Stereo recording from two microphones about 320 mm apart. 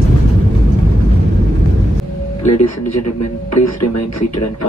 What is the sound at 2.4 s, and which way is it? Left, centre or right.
Music, left.